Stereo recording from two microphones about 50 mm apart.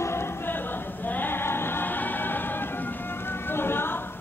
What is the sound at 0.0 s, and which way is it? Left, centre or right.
Music, left.